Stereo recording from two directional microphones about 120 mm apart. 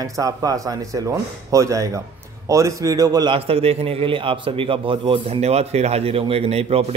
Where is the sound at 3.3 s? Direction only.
55° right (ahead or behind).